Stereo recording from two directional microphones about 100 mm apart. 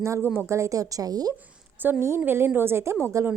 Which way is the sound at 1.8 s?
20° right (ahead or behind).